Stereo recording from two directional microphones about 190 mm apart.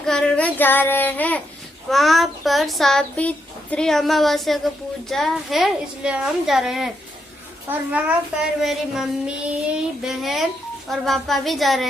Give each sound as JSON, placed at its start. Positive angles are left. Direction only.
{"t": 0.0, "sound": "child singing", "side_deg": 5}
{"t": 1.9, "sound": "speech", "side_deg": 0}